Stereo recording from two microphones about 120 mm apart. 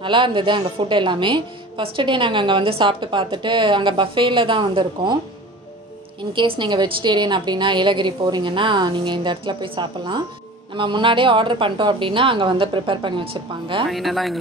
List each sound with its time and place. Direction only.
0.0 s a woman's voice: 45° right (ahead or behind)
6.3 s a woman's voice: 40° right (ahead or behind)
13.8 s speech: centre (ahead or behind)